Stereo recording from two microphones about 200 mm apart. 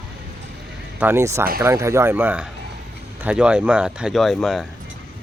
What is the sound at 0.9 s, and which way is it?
Speech, 10° right (ahead or behind).